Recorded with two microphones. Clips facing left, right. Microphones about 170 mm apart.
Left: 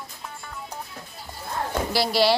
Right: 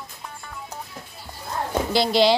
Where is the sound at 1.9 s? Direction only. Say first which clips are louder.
Right 3 dB; 20° right (ahead or behind).